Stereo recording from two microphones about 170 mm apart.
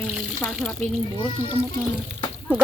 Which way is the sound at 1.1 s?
30° left (ahead or behind).